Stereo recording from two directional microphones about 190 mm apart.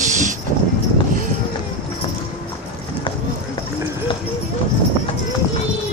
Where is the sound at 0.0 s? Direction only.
40° right (ahead or behind).